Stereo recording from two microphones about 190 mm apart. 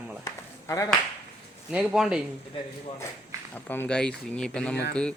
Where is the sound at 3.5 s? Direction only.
10° left (ahead or behind).